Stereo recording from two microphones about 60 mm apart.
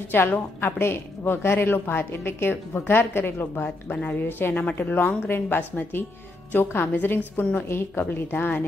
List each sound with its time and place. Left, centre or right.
0.1 s a woman's voice: left
3.9 s a woman's voice: left